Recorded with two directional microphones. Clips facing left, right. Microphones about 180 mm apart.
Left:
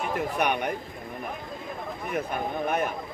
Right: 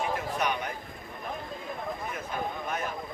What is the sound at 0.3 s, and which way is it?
Speech, 60° left (ahead or behind).